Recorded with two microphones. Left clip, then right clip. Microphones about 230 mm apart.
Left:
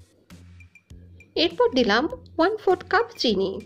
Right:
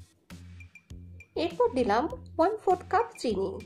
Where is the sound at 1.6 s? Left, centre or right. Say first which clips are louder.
Left 4 dB; left.